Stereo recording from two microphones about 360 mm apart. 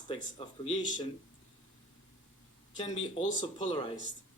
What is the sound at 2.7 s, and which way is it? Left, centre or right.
Speech, centre.